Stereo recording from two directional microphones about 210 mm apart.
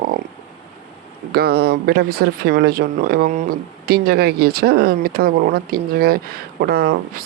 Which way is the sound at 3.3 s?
35° right (ahead or behind).